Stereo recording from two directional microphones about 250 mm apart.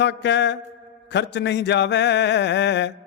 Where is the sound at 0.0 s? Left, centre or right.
Left.